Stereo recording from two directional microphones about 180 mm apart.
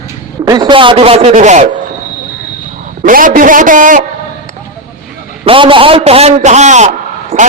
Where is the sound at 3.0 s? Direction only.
50° right (ahead or behind).